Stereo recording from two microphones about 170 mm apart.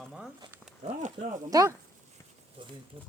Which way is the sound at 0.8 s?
40° right (ahead or behind).